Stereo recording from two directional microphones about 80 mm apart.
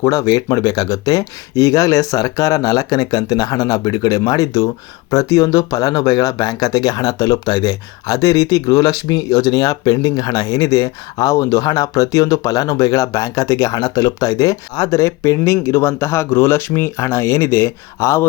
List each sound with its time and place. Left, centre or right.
0.0 s speech: left